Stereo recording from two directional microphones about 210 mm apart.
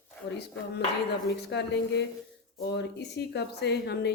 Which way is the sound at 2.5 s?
50° left (ahead or behind).